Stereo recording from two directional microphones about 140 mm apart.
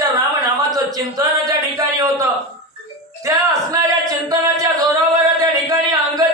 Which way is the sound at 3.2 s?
25° right (ahead or behind).